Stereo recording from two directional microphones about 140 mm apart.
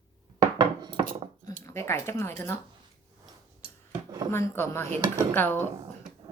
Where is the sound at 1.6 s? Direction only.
20° left (ahead or behind).